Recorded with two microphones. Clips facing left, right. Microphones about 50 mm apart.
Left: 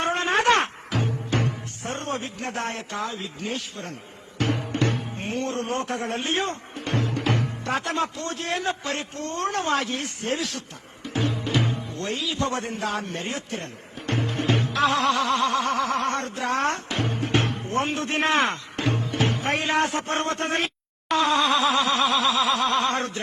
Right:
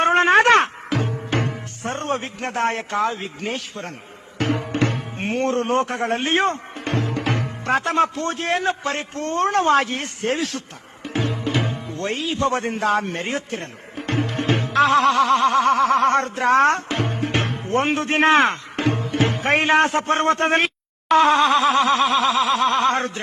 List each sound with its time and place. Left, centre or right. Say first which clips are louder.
0.0 s a sound: right 7 dB; right
1.0 s speech: right 2 dB; right
4.4 s music: right 4 dB; right
7.6 s a man's voice: right 7 dB; right
11.0 s music: right 3 dB; right
12.7 s a man's voice: right 7 dB; right